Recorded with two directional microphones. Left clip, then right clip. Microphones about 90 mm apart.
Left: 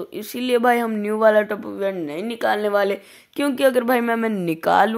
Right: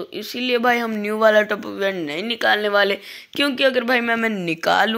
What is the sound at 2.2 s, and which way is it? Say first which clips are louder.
Speech: right 2 dB; 45° left (ahead or behind).